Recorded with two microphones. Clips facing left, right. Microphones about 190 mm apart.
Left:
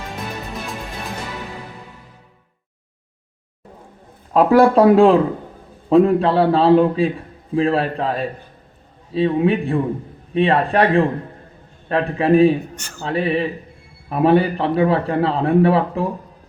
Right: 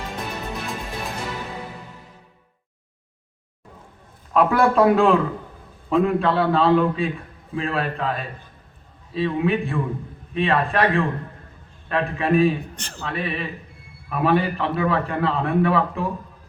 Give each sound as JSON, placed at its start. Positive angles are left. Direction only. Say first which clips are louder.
{"t": 4.4, "sound": "speech", "louder": "left 5 dB", "side_deg": 35}
{"t": 12.7, "sound": "speech", "louder": "left 1 dB", "side_deg": -35}
{"t": 13.0, "sound": "speech", "louder": "left 8 dB", "side_deg": 35}